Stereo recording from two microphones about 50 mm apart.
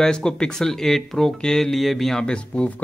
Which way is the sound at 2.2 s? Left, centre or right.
Centre.